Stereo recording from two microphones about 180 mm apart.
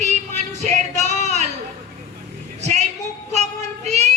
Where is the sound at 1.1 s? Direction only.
40° right (ahead or behind).